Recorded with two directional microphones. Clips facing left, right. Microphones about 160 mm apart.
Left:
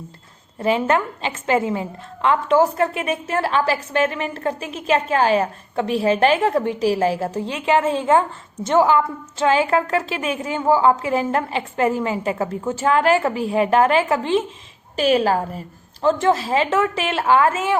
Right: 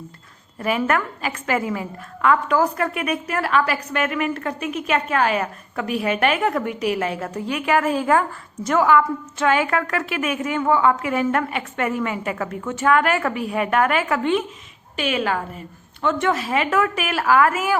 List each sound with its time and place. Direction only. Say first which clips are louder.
0.6 s a woman's voice: left 3 dB; 25° left (ahead or behind)